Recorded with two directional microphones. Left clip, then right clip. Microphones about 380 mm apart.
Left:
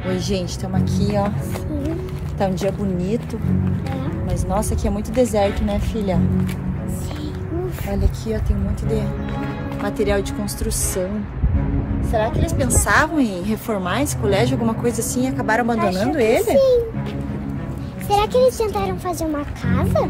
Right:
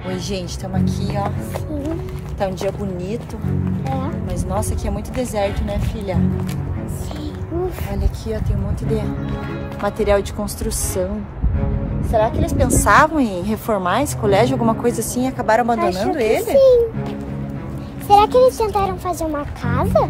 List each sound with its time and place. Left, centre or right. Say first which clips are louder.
0.1 s speech: left 2 dB; centre
2.3 s speech: even; centre
4.3 s speech: left 3 dB; centre
9.8 s a woman's voice: right 4 dB; centre
12.1 s a woman's voice: right 4 dB; centre
16.5 s a child's voice: right 6 dB; centre
18.0 s a woman's voice: right 4 dB; centre